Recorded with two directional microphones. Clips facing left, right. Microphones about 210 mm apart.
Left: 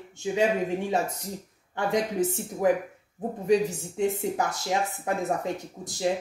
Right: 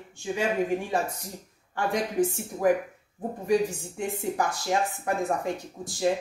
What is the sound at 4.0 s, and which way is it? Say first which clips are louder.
Speech: left 3 dB; 20° left (ahead or behind).